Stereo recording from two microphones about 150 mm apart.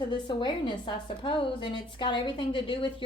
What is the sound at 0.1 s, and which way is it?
Speech, 30° left (ahead or behind).